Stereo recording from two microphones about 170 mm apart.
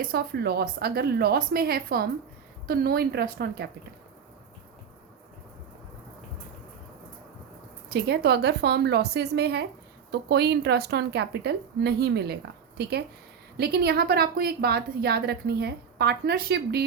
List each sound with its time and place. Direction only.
0.0 s a woman's voice: 65° right (ahead or behind)
8.0 s a woman's voice: 70° right (ahead or behind)